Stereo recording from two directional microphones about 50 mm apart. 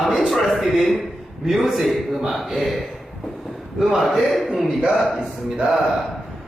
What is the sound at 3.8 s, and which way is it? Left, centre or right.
Speech, centre.